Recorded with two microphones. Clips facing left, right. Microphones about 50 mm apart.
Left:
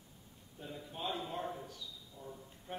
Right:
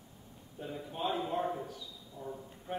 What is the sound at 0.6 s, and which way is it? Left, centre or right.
A man's voice, centre.